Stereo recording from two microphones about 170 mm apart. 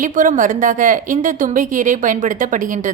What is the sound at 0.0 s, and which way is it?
A woman's voice, 50° right (ahead or behind).